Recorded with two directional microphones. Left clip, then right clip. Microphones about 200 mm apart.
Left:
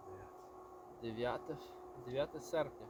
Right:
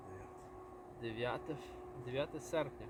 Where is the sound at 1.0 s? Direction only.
15° right (ahead or behind).